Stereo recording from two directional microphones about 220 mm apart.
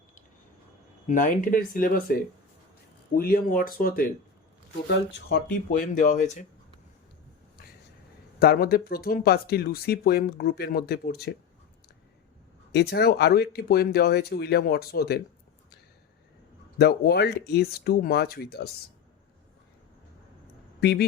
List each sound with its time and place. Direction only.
1.0 s speech: 35° left (ahead or behind)
3.2 s speech: 40° left (ahead or behind)
4.9 s speech: 50° left (ahead or behind)
5.7 s speech: 35° left (ahead or behind)
8.4 s speech: 45° left (ahead or behind)
12.7 s speech: 45° left (ahead or behind)
16.7 s speech: 45° left (ahead or behind)